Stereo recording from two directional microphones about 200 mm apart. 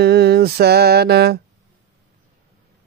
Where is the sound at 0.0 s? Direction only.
55° right (ahead or behind).